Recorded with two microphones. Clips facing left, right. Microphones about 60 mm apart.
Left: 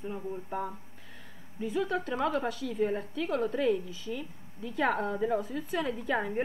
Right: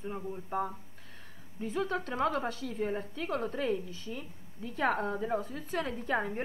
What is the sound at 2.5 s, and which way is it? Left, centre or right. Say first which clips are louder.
Speech: left 3 dB; left.